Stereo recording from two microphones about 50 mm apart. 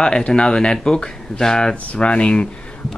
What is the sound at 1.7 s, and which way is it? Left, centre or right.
Speech, left.